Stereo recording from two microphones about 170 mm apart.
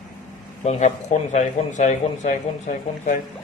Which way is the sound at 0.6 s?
40° left (ahead or behind).